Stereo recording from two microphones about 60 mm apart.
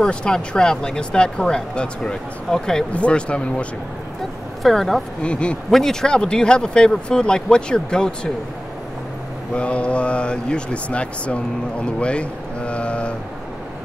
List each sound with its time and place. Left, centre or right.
0.0 s speech: centre
4.6 s speech: centre
5.2 s speech: centre
5.7 s speech: centre
9.6 s speech: centre